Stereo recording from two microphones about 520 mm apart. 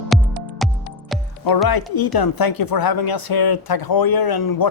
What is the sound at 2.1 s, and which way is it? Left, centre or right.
Speech, left.